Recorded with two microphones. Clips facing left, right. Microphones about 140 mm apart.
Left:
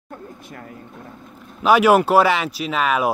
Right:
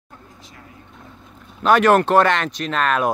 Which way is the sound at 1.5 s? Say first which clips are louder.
Left 1 dB; 5° left (ahead or behind).